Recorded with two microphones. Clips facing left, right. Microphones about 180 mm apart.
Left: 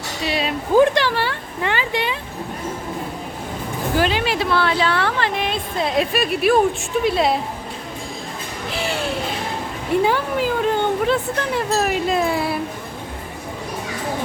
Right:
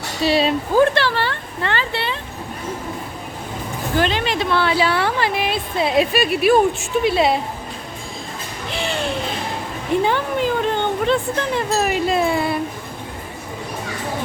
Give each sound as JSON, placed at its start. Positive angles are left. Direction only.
{"t": 0.3, "sound": "speech", "side_deg": -30}
{"t": 0.7, "sound": "speech", "side_deg": 15}
{"t": 3.9, "sound": "a woman's voice", "side_deg": 5}
{"t": 8.7, "sound": "a sound", "side_deg": 5}
{"t": 10.0, "sound": "a woman's voice", "side_deg": 5}